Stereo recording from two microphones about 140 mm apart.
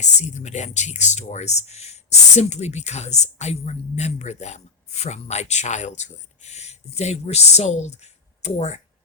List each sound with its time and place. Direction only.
0.0 s speech: 55° left (ahead or behind)